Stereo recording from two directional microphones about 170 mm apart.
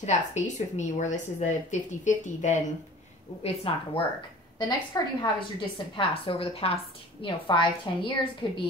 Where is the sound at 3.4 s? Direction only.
35° left (ahead or behind).